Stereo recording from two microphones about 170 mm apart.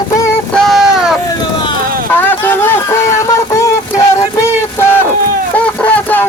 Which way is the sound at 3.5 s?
20° left (ahead or behind).